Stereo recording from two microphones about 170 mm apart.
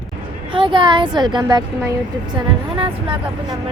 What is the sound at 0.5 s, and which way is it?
Speech, 30° right (ahead or behind).